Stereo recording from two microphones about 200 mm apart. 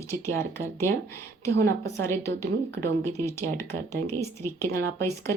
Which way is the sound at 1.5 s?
55° right (ahead or behind).